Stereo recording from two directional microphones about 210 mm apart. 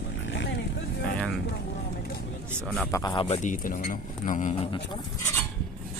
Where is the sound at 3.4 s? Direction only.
40° left (ahead or behind).